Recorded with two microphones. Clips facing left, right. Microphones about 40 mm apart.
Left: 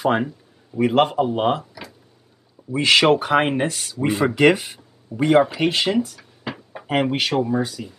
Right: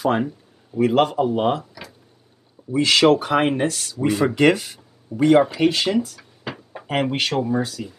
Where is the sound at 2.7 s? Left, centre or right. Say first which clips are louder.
Even; left.